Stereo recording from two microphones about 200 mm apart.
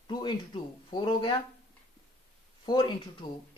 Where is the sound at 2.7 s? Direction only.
20° left (ahead or behind).